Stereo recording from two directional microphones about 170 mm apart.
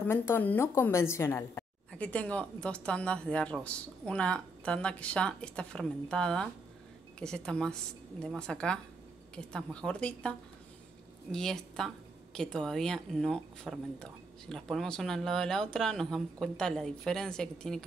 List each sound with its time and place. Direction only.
0.1 s a woman's voice: 15° left (ahead or behind)
11.3 s speech: 5° left (ahead or behind)